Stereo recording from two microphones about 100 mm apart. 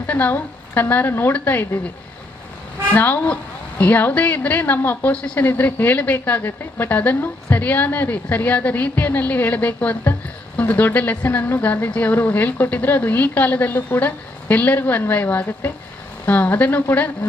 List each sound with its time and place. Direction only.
0.1 s a woman's voice: 15° left (ahead or behind)
2.9 s a woman's voice: 15° left (ahead or behind)